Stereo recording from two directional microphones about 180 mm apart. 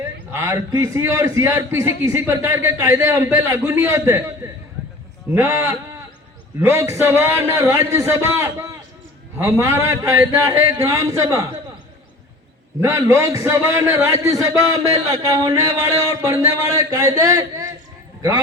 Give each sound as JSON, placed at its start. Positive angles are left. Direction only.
{"t": 0.0, "sound": "a man's voice", "side_deg": -15}
{"t": 5.3, "sound": "a man's voice", "side_deg": -15}
{"t": 6.8, "sound": "a man's voice", "side_deg": -15}
{"t": 12.8, "sound": "a man's voice", "side_deg": -15}